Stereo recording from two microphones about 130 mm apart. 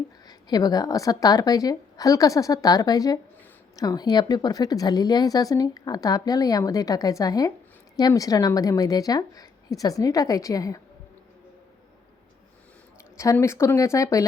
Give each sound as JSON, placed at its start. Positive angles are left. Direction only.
{"t": 0.3, "sound": "a woman's voice", "side_deg": 30}
{"t": 13.1, "sound": "speech", "side_deg": 20}